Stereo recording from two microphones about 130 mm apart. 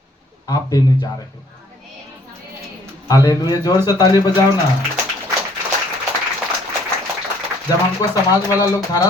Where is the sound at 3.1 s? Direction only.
30° left (ahead or behind).